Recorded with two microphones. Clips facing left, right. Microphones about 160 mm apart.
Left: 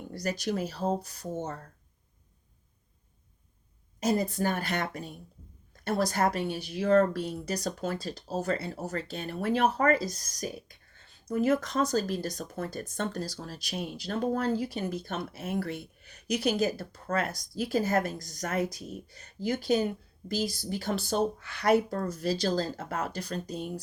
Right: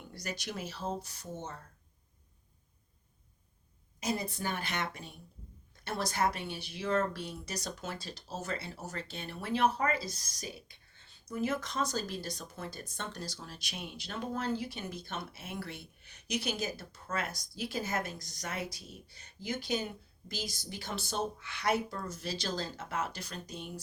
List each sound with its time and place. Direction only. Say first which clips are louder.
0.1 s speech: left 9 dB; 40° left (ahead or behind)
4.0 s a woman's voice: left 8 dB; 45° left (ahead or behind)